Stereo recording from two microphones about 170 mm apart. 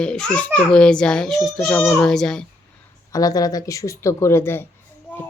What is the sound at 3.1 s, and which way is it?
Speech, 20° left (ahead or behind).